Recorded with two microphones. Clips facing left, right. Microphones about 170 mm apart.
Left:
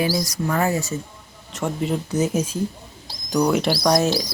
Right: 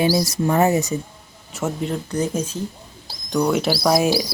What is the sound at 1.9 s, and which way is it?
Speech, 5° left (ahead or behind).